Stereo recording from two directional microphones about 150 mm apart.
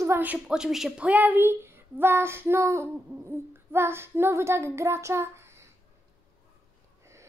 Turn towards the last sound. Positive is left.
turn(degrees=-15)  # may be behind; listen again after turning